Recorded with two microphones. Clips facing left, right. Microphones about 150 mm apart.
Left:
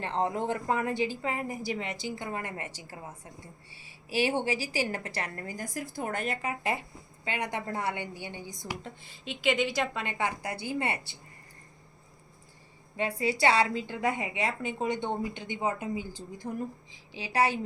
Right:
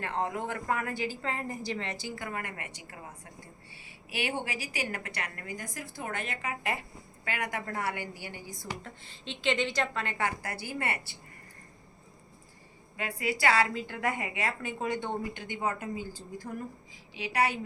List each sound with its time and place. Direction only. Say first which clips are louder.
0.0 s a woman's voice: left 3 dB; 30° left (ahead or behind)
4.1 s a woman's voice: left 6 dB; 30° left (ahead or behind)
8.6 s a woman's voice: left 1 dB; 10° left (ahead or behind)
13.0 s a woman's voice: left 4 dB; 25° left (ahead or behind)
17.2 s a woman's voice: left 2 dB; 30° left (ahead or behind)